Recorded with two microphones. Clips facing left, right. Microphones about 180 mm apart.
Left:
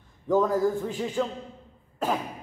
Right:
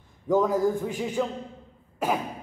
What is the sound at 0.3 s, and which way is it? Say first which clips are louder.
A man's voice: even; 10° right (ahead or behind).